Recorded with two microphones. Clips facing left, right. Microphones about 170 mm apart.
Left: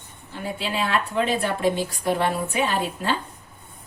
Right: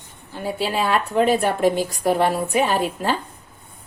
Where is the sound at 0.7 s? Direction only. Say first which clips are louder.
Right 3 dB; 45° right (ahead or behind).